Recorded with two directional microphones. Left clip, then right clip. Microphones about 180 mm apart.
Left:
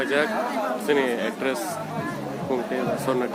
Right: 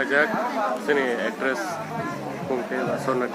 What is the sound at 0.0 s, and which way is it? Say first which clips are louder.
A man's voice: right 2 dB; 25° left (ahead or behind).